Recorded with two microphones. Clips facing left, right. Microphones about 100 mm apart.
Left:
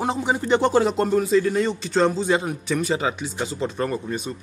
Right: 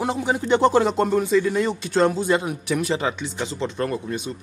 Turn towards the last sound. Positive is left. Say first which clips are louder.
# even
turn(degrees=0)  # may be behind; listen again after turning